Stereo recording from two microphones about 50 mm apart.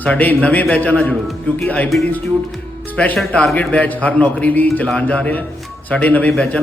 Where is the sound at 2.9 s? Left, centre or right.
Left.